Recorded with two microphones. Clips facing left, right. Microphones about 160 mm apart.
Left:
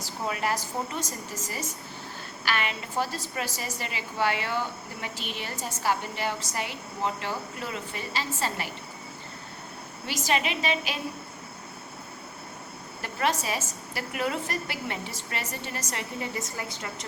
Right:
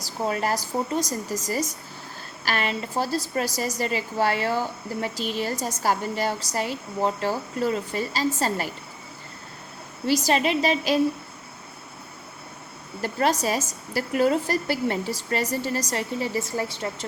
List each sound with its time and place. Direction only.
0.0 s a woman's voice: 35° right (ahead or behind)
10.1 s a woman's voice: 35° right (ahead or behind)
13.0 s a woman's voice: 35° right (ahead or behind)